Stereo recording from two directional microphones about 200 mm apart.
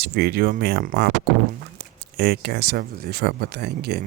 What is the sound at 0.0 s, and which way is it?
Speech, 55° right (ahead or behind).